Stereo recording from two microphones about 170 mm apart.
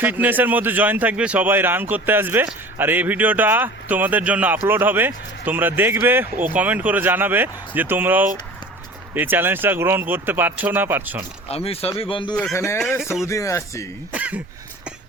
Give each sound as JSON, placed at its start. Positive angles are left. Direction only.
{"t": 0.0, "sound": "speech", "side_deg": -10}
{"t": 11.4, "sound": "speech", "side_deg": 35}
{"t": 12.5, "sound": "speech", "side_deg": 15}
{"t": 14.1, "sound": "speech", "side_deg": -10}